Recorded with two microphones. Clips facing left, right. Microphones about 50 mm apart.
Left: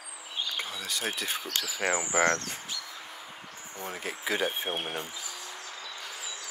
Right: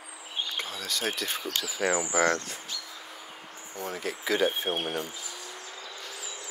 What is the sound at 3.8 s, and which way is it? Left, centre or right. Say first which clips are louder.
Speech: right 3 dB; centre.